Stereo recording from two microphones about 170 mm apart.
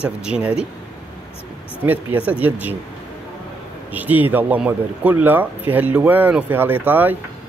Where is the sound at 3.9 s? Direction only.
10° right (ahead or behind).